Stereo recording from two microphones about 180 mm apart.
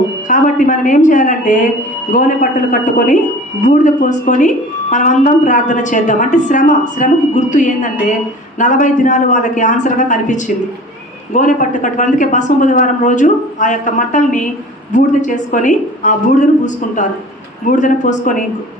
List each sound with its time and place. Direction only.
0.3 s a woman's voice: 45° left (ahead or behind)